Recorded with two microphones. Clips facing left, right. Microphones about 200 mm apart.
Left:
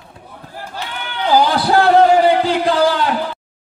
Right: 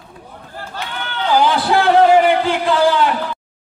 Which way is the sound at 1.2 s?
40° left (ahead or behind).